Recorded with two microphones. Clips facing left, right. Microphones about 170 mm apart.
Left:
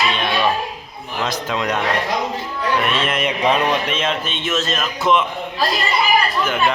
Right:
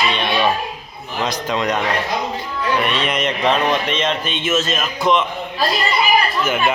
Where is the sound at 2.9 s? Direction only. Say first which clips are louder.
Even; 5° left (ahead or behind).